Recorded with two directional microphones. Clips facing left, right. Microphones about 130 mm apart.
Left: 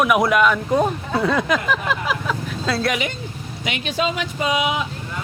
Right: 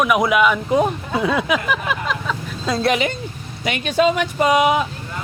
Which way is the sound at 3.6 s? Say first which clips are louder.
Right 6 dB; 50° right (ahead or behind).